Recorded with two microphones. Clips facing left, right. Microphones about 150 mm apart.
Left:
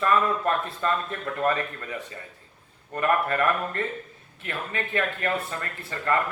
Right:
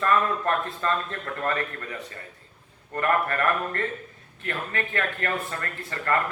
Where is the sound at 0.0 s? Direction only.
15° left (ahead or behind).